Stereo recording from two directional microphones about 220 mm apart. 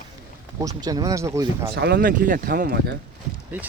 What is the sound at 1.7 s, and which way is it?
Speech, 50° right (ahead or behind).